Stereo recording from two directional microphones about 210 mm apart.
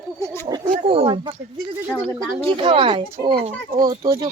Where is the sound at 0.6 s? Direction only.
25° right (ahead or behind).